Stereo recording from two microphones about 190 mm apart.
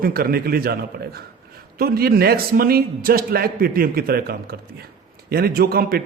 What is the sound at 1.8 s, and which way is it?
A man's voice, 55° right (ahead or behind).